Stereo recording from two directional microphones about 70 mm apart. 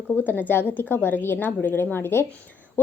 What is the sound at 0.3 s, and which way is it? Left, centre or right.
A woman's voice, left.